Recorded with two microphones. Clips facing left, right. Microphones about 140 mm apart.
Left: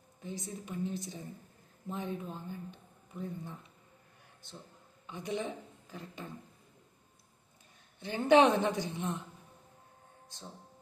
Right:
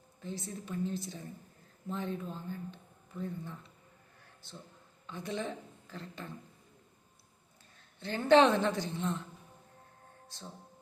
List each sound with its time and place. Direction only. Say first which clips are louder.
0.2 s speech: right 1 dB; 15° left (ahead or behind)
5.0 s speech: left 1 dB; 15° left (ahead or behind)
7.9 s speech: even; 15° left (ahead or behind)
10.2 s speech: right 1 dB; 15° left (ahead or behind)